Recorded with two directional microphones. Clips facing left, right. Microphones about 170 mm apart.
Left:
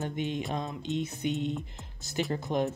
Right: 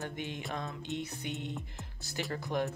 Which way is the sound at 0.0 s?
20° left (ahead or behind).